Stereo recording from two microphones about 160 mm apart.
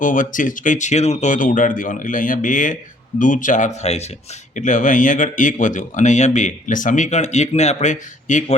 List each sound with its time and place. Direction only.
0.0 s speech: 55° left (ahead or behind)